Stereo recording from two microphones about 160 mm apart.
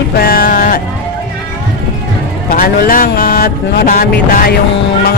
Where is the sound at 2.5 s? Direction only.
65° left (ahead or behind).